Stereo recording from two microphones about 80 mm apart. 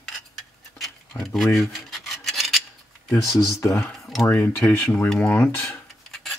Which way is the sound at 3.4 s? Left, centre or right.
Left.